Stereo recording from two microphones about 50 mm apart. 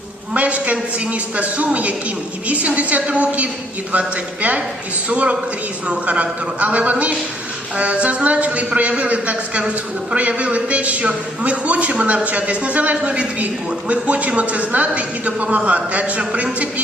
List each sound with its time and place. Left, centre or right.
0.3 s a man's voice: right
5.0 s a man's voice: right